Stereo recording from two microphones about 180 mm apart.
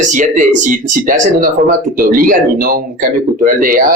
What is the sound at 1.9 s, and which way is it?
A man's voice, 50° right (ahead or behind).